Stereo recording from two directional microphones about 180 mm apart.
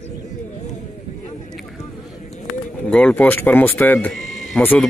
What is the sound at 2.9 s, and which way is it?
A man's voice, 5° left (ahead or behind).